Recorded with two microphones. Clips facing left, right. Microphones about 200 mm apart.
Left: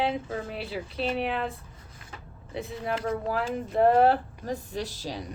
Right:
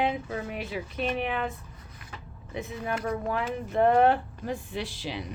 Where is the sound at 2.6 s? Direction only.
30° left (ahead or behind).